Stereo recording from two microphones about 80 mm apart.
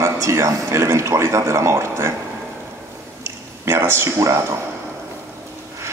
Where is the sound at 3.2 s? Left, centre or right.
Right.